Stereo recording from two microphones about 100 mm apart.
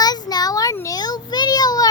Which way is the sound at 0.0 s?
40° left (ahead or behind).